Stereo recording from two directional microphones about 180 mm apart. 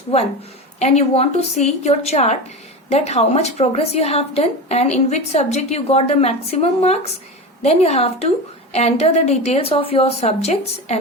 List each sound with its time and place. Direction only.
0.8 s a woman's voice: 35° left (ahead or behind)